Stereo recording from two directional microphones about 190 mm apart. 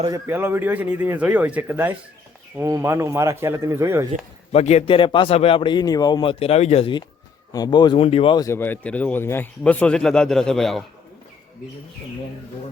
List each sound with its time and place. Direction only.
0.3 s speech: 10° right (ahead or behind)
4.5 s a man's voice: 35° left (ahead or behind)
8.4 s a man's voice: 10° left (ahead or behind)